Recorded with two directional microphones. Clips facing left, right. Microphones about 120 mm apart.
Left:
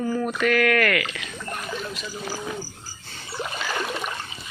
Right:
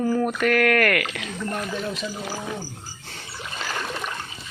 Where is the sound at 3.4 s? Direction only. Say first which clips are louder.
Left 7 dB; 45° left (ahead or behind).